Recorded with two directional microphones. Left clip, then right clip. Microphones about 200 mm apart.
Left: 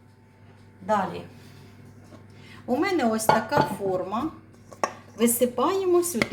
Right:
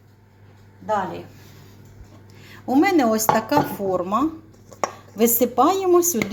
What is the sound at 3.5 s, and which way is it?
Speech, 40° right (ahead or behind).